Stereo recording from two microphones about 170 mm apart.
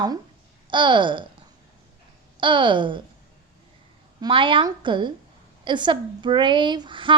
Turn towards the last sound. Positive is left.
turn(degrees=-30)  # may be behind; listen again after turning